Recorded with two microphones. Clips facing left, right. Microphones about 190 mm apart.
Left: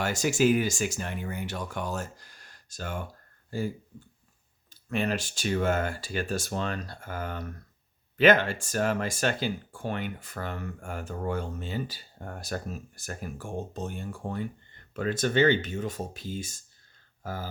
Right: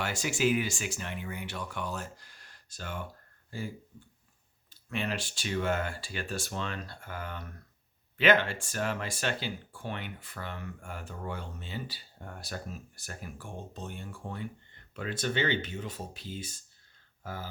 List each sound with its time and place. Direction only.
0.0 s speech: 45° left (ahead or behind)
4.7 s speech: 45° left (ahead or behind)